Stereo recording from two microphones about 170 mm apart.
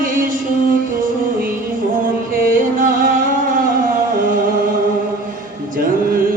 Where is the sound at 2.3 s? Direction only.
55° right (ahead or behind).